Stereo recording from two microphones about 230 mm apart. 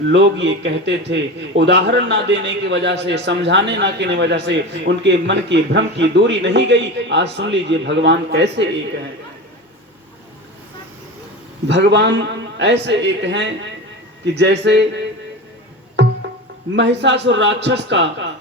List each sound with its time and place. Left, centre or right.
0.1 s a man's voice: right
11.7 s a man's voice: right
16.7 s a man's voice: right